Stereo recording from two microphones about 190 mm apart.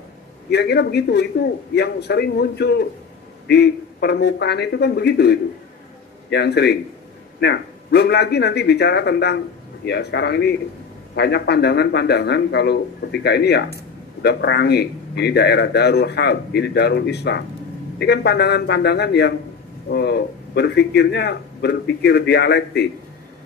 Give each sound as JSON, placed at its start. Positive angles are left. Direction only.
{"t": 0.5, "sound": "speech", "side_deg": 60}